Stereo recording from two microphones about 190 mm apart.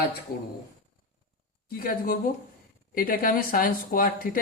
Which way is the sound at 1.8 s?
50° left (ahead or behind).